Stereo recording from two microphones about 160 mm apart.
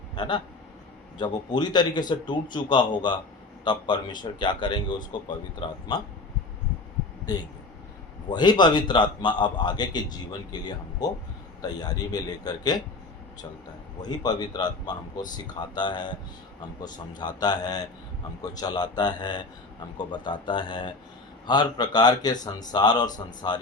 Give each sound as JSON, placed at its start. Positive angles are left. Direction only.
{"t": 0.2, "sound": "a man's voice", "side_deg": 30}
{"t": 8.3, "sound": "a man's voice", "side_deg": 25}
{"t": 14.0, "sound": "a man's voice", "side_deg": 25}